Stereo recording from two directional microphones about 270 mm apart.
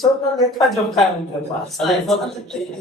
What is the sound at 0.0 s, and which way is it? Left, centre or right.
A man's voice, centre.